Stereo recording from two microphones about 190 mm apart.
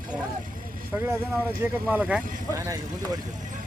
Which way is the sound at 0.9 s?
15° right (ahead or behind).